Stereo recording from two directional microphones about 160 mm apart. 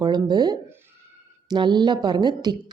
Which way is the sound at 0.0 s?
25° right (ahead or behind).